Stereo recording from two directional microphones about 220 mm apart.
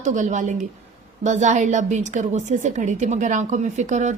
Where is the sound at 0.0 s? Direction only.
35° right (ahead or behind).